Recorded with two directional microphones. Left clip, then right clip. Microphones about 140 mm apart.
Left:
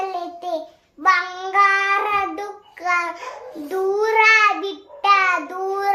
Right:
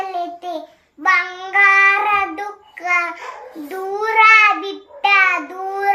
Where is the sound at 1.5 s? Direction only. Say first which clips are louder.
Right 5 dB; 35° left (ahead or behind).